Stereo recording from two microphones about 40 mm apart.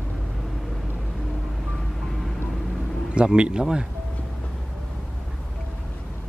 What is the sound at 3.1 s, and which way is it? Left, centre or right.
Speech, right.